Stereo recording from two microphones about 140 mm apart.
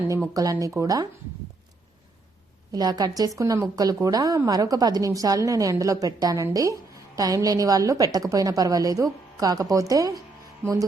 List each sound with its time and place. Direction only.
0.0 s a sound: 15° right (ahead or behind)
0.3 s a woman's voice: 25° right (ahead or behind)
2.7 s a woman's voice: 30° right (ahead or behind)